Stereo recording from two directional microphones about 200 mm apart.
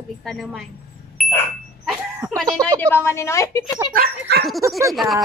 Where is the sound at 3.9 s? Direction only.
55° right (ahead or behind).